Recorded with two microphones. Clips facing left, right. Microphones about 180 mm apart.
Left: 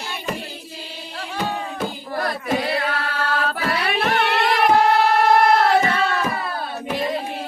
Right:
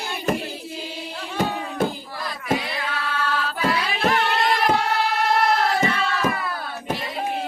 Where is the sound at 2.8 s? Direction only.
55° left (ahead or behind).